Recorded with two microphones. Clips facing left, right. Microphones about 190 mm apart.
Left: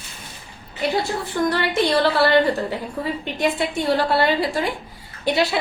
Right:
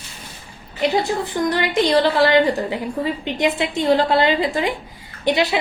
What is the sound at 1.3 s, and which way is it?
A woman's voice, 15° right (ahead or behind).